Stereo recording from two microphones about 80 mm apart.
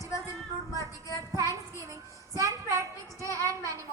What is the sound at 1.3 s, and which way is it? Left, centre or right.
A woman's voice, right.